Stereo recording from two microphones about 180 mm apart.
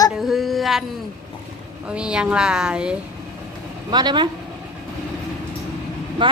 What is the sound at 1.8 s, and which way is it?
Speech, 5° right (ahead or behind).